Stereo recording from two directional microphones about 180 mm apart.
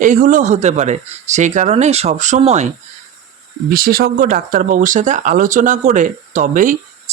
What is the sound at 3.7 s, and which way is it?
Speech, 55° right (ahead or behind).